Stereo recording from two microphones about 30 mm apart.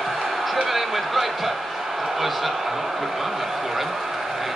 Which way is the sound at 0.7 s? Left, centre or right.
Centre.